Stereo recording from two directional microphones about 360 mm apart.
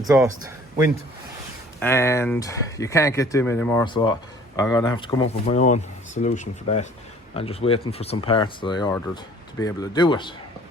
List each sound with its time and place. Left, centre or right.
0.0 s a man's voice: centre
1.8 s speech: centre